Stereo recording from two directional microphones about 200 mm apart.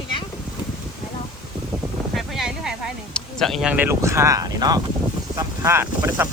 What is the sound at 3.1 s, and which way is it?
Speech, centre (ahead or behind).